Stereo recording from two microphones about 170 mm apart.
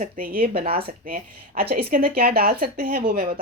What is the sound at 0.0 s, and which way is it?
Speech, 60° right (ahead or behind).